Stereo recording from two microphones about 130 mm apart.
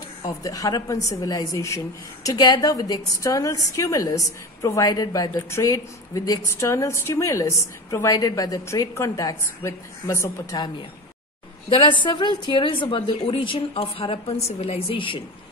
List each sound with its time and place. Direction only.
0.4 s a woman's voice: 25° left (ahead or behind)
11.7 s a woman's voice: 40° left (ahead or behind)